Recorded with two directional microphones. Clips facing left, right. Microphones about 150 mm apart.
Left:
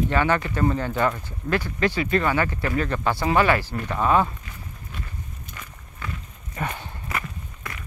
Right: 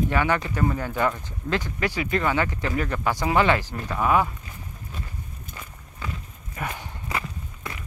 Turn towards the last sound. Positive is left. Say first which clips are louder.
# even
turn(degrees=-15)  # may be behind; listen again after turning